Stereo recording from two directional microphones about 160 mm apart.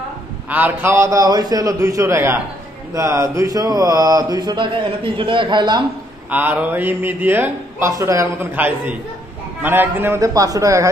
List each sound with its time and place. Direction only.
0.5 s a man's voice: 10° right (ahead or behind); by 5.9 s 30° right (ahead or behind)
6.3 s a man's voice: 10° right (ahead or behind)